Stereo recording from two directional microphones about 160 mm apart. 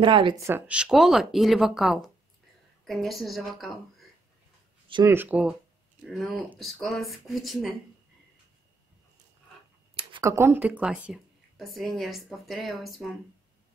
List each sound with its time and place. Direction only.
0.0 s speech: 30° right (ahead or behind)
0.4 s speech: 15° right (ahead or behind)
5.0 s speech: 15° right (ahead or behind)
6.0 s speech: 5° left (ahead or behind)
10.2 s speech: 15° right (ahead or behind)